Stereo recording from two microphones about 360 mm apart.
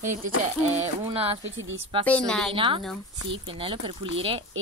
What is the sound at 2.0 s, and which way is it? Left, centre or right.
Speech, centre.